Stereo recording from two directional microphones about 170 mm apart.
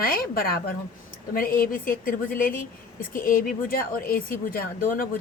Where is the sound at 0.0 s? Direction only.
60° left (ahead or behind).